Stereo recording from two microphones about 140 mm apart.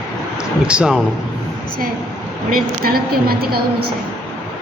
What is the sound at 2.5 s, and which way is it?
A woman's voice, 90° right.